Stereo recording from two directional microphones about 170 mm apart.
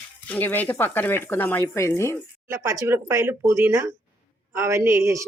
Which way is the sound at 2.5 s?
15° right (ahead or behind).